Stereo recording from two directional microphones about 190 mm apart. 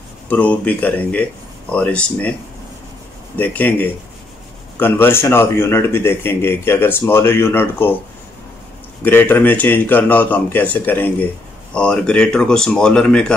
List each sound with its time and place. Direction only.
0.3 s speech: 10° left (ahead or behind)
3.3 s speech: 10° left (ahead or behind)
9.0 s speech: 10° left (ahead or behind)